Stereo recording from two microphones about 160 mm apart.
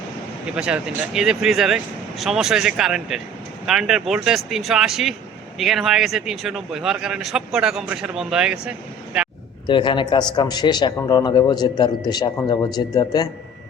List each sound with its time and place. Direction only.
0.5 s a man's voice: 5° right (ahead or behind)
9.6 s a man's voice: 30° left (ahead or behind)